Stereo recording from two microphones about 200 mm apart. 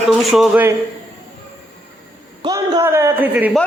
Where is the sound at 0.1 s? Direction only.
Centre (ahead or behind).